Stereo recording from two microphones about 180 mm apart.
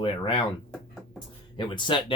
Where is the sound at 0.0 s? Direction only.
30° left (ahead or behind).